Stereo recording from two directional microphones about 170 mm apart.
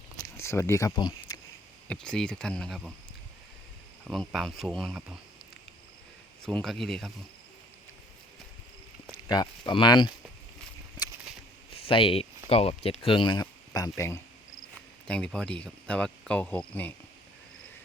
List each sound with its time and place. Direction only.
0.3 s speech: 15° left (ahead or behind)
1.9 s speech: 5° left (ahead or behind)
4.1 s speech: centre (ahead or behind)
6.4 s speech: 5° left (ahead or behind)
9.1 s speech: 25° left (ahead or behind)
11.7 s a sound: 30° left (ahead or behind)
12.5 s speech: 35° left (ahead or behind); by 14.2 s 20° left (ahead or behind)
15.0 s speech: 5° left (ahead or behind)